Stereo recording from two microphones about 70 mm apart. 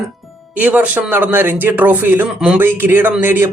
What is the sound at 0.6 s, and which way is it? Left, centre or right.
Speech, centre.